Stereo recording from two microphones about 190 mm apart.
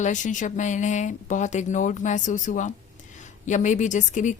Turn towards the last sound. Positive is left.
turn(degrees=40)  # may be behind; listen again after turning